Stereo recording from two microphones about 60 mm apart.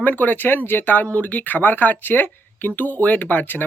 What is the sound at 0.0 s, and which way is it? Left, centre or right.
Speech, left.